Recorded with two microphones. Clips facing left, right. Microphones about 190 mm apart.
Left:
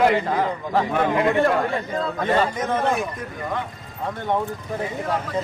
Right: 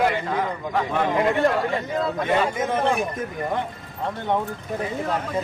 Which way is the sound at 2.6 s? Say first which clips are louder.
Even; 10° right (ahead or behind).